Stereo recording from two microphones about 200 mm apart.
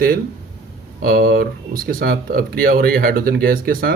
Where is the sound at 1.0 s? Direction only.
50° right (ahead or behind).